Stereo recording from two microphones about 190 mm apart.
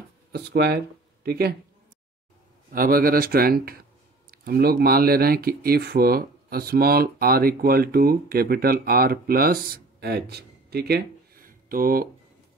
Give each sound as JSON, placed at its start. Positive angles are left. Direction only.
{"t": 0.3, "sound": "speech", "side_deg": -60}
{"t": 2.7, "sound": "speech", "side_deg": -50}